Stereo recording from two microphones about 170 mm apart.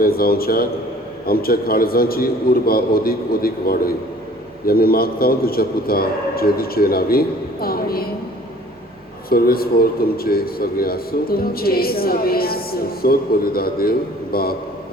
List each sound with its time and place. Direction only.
0.0 s a man's voice: 60° left (ahead or behind)
9.3 s a man's voice: 60° left (ahead or behind)